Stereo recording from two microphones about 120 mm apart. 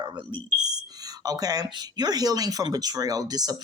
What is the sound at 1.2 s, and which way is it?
Speech, 30° right (ahead or behind).